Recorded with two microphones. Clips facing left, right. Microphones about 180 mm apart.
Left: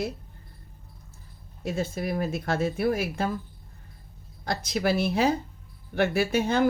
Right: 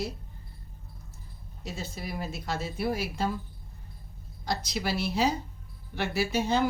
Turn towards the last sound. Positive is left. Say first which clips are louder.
# left 3 dB
turn(degrees=55)  # may be behind; listen again after turning